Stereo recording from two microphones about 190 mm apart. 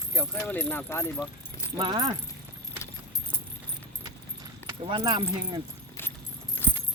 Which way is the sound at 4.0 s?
20° right (ahead or behind).